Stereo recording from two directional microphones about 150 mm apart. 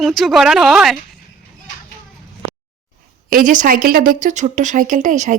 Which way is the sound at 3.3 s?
60° right (ahead or behind).